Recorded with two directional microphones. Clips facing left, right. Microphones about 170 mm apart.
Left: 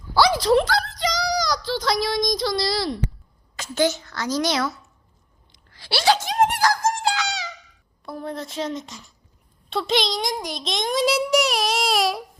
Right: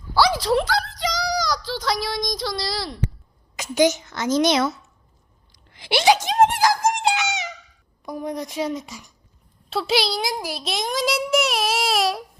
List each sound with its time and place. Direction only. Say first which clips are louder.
0.1 s a sound: left 2 dB; 5° right (ahead or behind)
3.5 s a child's voice: right 3 dB; 15° right (ahead or behind)
5.7 s wail: right 3 dB; 20° right (ahead or behind)
8.0 s a woman's voice: right 3 dB; 15° right (ahead or behind)